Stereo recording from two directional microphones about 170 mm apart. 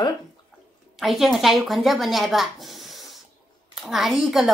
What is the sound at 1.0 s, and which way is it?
A woman's voice, centre (ahead or behind).